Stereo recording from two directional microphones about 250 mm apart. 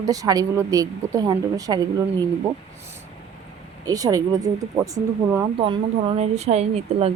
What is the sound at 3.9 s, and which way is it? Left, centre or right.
Speech, centre.